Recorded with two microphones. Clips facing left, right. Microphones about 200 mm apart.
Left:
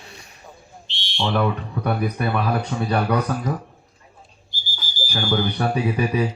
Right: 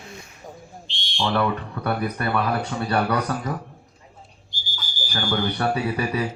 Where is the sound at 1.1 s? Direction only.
10° left (ahead or behind).